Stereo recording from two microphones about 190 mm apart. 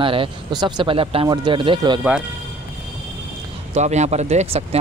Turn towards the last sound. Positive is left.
turn(degrees=-35)  # may be behind; listen again after turning